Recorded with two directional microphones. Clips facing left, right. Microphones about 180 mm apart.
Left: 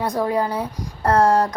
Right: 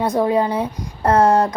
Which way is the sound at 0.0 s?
20° right (ahead or behind).